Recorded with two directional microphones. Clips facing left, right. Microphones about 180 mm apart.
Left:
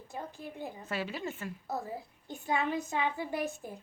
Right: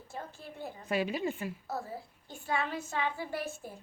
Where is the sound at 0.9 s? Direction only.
15° right (ahead or behind).